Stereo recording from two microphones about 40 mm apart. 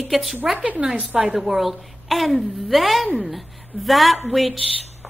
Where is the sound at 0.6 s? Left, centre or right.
Right.